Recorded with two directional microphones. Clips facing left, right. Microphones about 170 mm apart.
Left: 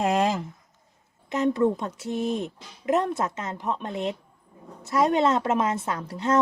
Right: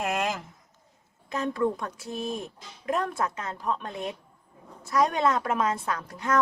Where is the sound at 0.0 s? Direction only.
30° left (ahead or behind).